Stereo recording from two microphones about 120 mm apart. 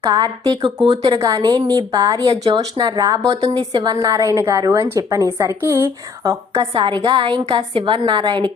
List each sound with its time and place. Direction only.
0.0 s a woman's voice: 35° right (ahead or behind)
4.0 s a woman's voice: 30° right (ahead or behind)
6.7 s a woman's voice: 40° right (ahead or behind)